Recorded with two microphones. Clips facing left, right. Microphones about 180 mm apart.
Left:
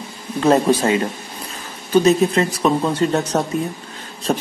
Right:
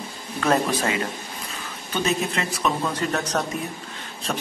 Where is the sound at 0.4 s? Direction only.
30° left (ahead or behind).